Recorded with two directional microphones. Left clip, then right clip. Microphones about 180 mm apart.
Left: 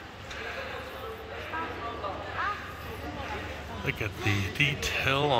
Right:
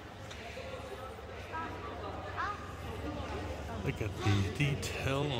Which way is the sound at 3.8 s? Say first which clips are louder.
Left 7 dB; 5° right (ahead or behind).